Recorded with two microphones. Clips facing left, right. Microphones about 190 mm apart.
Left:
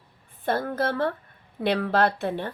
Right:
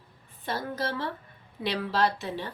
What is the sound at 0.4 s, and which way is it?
A woman's voice, 55° left (ahead or behind).